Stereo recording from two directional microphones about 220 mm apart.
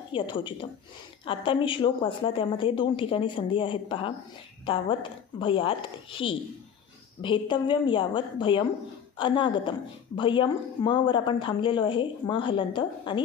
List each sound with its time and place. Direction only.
0.1 s a woman's voice: 20° left (ahead or behind)